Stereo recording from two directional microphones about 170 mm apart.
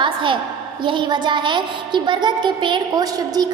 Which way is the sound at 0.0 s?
30° right (ahead or behind).